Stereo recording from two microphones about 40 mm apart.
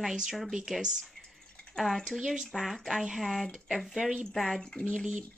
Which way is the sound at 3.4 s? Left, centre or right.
Centre.